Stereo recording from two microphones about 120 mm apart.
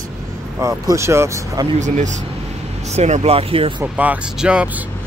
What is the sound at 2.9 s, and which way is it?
Speech, 70° right (ahead or behind).